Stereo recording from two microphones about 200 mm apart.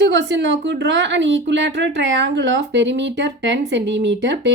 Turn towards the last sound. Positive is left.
turn(degrees=-60)  # may be behind; listen again after turning